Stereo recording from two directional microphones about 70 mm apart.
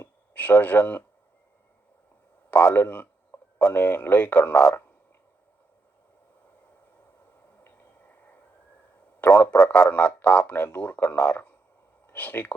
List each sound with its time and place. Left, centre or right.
0.0 s speech: left
2.5 s a man's voice: left
7.6 s a sound: left
9.2 s speech: left